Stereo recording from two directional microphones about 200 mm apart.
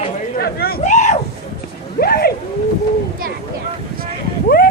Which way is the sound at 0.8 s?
35° left (ahead or behind).